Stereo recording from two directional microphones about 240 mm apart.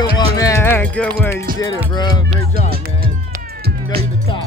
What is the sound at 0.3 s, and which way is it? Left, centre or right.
Music, centre.